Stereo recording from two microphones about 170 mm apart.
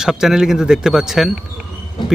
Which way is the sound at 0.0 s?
5° right (ahead or behind).